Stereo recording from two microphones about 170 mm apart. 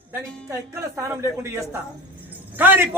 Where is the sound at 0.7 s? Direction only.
15° right (ahead or behind).